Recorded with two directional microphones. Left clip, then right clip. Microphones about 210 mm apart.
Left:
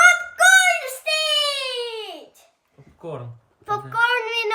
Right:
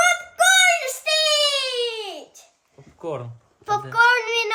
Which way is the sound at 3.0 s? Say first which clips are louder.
Right 4 dB; 35° right (ahead or behind).